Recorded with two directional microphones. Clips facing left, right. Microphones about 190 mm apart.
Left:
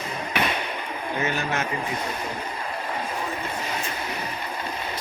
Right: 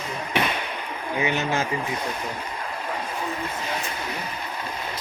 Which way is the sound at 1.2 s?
20° right (ahead or behind).